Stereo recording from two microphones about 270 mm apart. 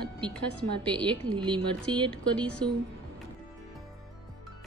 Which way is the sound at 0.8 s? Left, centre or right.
Centre.